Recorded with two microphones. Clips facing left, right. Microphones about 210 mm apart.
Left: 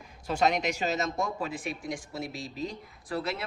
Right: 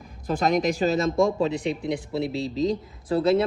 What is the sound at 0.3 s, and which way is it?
Speech, 40° right (ahead or behind).